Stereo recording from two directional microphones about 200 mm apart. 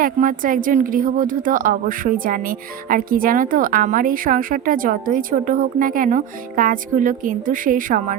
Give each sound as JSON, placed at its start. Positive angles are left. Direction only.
{"t": 0.0, "sound": "speech", "side_deg": -45}